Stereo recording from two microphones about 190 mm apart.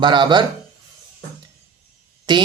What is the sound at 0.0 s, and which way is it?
Speech, 25° right (ahead or behind).